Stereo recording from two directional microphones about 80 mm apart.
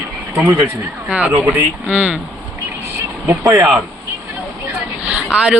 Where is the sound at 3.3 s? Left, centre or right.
Right.